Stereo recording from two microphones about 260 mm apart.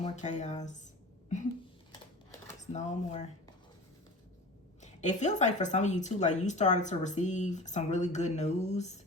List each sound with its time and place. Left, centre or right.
0.0 s speech: left
2.6 s speech: left
4.8 s speech: left